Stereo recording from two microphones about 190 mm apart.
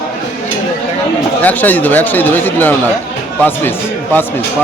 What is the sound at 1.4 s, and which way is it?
Speech, 10° left (ahead or behind).